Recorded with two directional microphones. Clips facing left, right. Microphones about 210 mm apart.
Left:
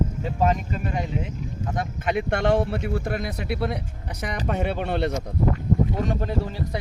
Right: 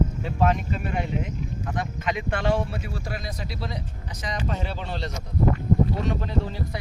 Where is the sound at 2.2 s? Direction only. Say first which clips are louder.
Left 5 dB; 55° left (ahead or behind).